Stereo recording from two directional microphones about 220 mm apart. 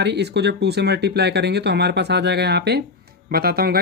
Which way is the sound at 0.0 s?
50° right (ahead or behind).